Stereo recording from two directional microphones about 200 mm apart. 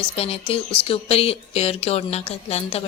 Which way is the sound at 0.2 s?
30° left (ahead or behind).